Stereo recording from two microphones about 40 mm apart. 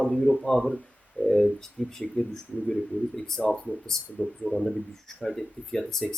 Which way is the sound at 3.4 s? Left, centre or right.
Left.